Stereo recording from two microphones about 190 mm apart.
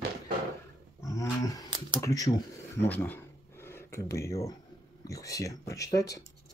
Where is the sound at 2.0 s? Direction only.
20° left (ahead or behind).